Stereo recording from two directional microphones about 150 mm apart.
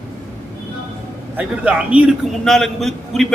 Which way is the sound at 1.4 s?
10° right (ahead or behind).